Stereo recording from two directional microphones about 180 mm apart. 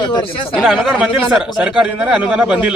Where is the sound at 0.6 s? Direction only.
Centre (ahead or behind).